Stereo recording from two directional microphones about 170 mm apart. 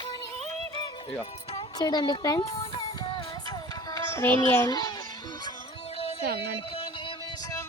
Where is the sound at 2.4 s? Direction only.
35° left (ahead or behind).